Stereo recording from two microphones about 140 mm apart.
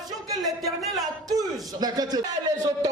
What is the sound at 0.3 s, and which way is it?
A man's voice, 25° right (ahead or behind).